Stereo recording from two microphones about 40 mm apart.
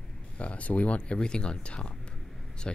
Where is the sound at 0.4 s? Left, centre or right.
Left.